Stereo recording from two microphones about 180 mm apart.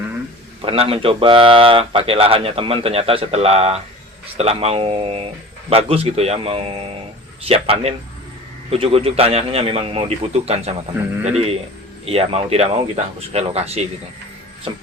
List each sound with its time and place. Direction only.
0.6 s speech: 30° right (ahead or behind)
12.0 s speech: 35° right (ahead or behind)